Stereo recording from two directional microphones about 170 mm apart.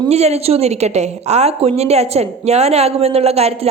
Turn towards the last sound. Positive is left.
turn(degrees=-40)  # may be behind; listen again after turning